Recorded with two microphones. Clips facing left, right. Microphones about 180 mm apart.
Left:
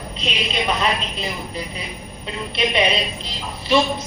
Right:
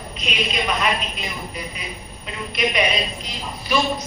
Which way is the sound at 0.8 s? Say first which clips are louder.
Left 1 dB; 30° left (ahead or behind).